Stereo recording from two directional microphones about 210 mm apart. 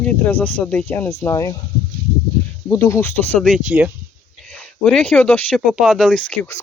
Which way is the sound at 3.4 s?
Centre (ahead or behind).